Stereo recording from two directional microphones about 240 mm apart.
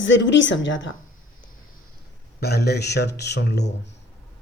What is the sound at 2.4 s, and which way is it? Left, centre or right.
A woman's voice, left.